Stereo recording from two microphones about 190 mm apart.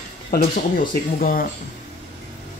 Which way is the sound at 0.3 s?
45° left (ahead or behind).